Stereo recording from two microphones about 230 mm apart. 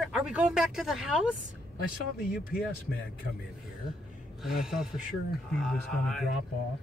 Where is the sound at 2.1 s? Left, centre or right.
Left.